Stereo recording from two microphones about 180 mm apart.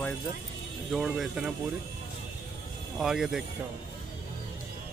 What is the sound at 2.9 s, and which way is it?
Speech, centre (ahead or behind).